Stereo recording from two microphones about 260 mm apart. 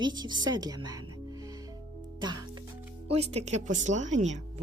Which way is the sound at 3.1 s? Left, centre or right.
Right.